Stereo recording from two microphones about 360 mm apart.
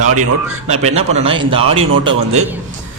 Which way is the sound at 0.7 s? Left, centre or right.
Centre.